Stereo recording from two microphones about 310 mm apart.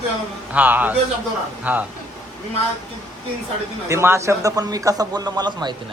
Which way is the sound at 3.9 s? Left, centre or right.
Centre.